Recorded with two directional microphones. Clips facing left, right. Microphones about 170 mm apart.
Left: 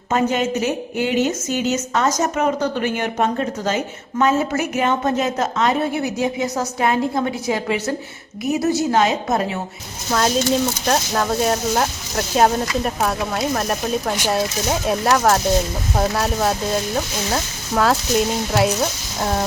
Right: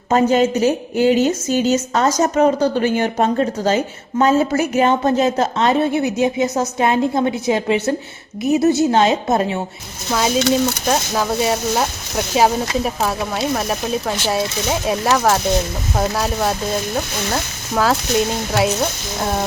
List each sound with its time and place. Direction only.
0.1 s a woman's voice: 35° right (ahead or behind)
10.1 s speech: 5° right (ahead or behind)